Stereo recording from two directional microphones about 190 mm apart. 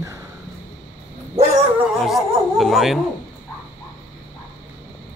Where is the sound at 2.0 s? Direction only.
Centre (ahead or behind).